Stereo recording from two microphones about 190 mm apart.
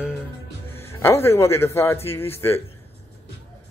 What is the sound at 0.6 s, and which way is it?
Speech, 10° left (ahead or behind).